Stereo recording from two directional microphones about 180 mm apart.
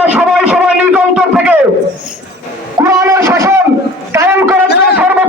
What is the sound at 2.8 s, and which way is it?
A man's voice, 15° right (ahead or behind).